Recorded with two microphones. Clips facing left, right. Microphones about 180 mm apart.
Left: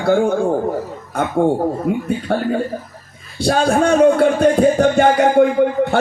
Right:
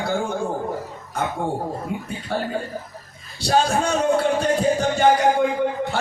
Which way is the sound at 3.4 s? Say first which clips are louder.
Left 5 dB; 60° left (ahead or behind).